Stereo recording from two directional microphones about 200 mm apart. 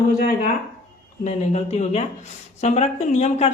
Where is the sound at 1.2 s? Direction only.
35° left (ahead or behind).